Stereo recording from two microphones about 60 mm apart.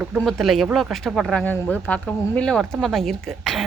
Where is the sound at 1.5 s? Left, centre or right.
Left.